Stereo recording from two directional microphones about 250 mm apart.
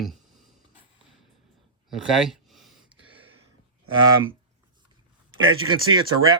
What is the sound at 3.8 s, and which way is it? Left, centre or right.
Speech, right.